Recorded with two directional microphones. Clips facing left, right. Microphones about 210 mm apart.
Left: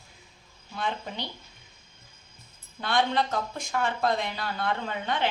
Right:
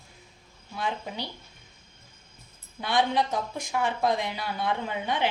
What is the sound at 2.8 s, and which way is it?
Speech, 15° right (ahead or behind).